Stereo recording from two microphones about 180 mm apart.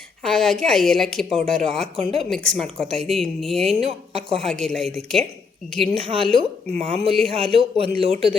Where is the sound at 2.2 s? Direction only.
5° left (ahead or behind).